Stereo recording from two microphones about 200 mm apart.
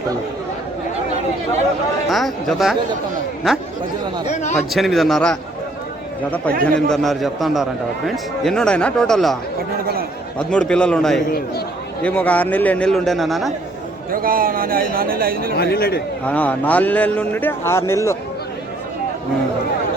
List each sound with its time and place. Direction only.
2.0 s a man's voice: centre (ahead or behind)
4.3 s a man's voice: 35° left (ahead or behind)
4.5 s a man's voice: centre (ahead or behind)
6.7 s a man's voice: 5° left (ahead or behind)
11.3 s a man's voice: 50° left (ahead or behind)
12.0 s a man's voice: 5° left (ahead or behind)
14.1 s a man's voice: 45° right (ahead or behind)
15.5 s a man's voice: 50° left (ahead or behind)
16.2 s a man's voice: 5° left (ahead or behind)